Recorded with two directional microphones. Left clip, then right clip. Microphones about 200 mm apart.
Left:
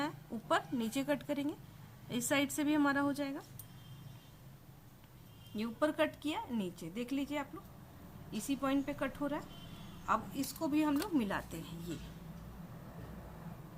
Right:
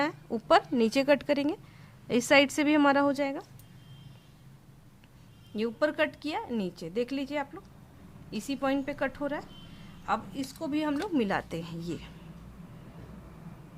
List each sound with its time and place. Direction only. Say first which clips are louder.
0.0 s a woman's voice: right 10 dB; 50° right (ahead or behind)
5.5 s a woman's voice: right 6 dB; 45° right (ahead or behind)
8.6 s a woman's voice: right 7 dB; 45° right (ahead or behind)